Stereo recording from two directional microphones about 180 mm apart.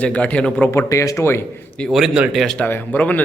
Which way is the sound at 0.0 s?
5° left (ahead or behind).